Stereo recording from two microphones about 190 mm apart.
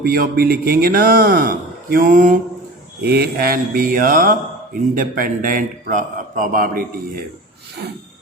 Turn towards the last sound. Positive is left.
turn(degrees=-50)  # may be behind; listen again after turning